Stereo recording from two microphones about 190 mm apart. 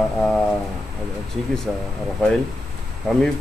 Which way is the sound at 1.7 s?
5° left (ahead or behind).